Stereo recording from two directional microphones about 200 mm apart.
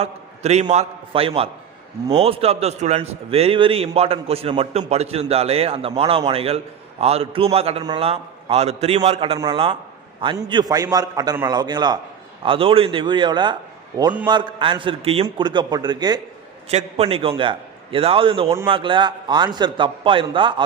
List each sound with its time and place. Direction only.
0.0 s a man's voice: 30° right (ahead or behind)